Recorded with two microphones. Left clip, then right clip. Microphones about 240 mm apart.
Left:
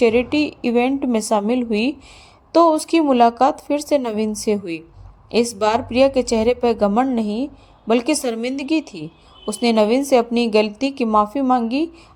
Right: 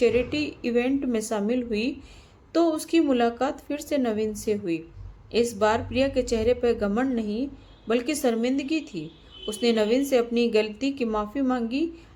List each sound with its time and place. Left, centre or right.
0.0 s speech: left